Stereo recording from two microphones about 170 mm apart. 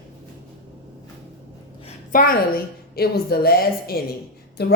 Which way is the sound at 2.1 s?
55° left (ahead or behind).